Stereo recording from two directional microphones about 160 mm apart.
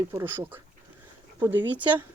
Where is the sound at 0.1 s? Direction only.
15° right (ahead or behind).